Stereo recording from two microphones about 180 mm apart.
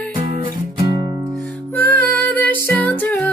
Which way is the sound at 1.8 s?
10° left (ahead or behind).